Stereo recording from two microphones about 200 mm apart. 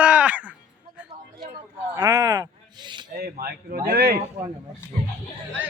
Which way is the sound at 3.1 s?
50° right (ahead or behind).